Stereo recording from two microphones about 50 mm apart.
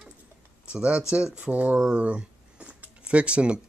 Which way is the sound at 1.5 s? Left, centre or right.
Right.